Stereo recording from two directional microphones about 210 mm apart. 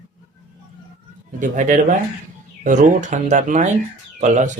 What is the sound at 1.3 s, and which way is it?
Speech, 35° right (ahead or behind).